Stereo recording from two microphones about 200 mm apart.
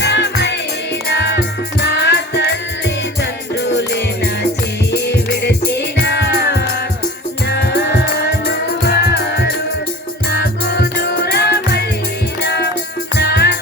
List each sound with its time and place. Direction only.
0.0 s music: 55° left (ahead or behind)